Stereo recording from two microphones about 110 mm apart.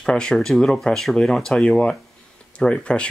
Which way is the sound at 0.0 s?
5° left (ahead or behind).